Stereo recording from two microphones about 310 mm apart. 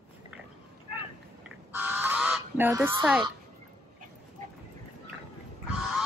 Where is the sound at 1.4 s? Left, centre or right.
Centre.